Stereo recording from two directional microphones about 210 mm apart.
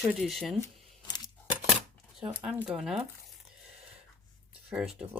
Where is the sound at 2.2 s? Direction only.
5° right (ahead or behind).